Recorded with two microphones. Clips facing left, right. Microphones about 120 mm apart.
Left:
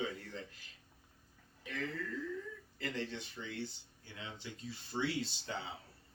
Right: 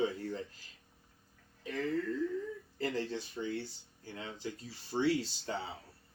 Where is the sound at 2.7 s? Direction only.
35° right (ahead or behind).